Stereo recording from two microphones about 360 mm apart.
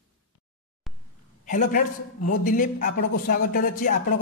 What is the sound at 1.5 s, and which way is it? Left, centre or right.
A man's voice, left.